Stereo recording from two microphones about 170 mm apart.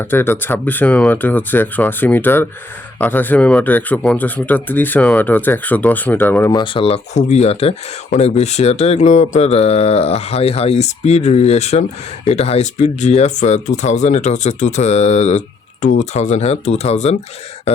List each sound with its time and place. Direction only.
0.0 s speech: 15° left (ahead or behind)
6.5 s speech: 30° left (ahead or behind)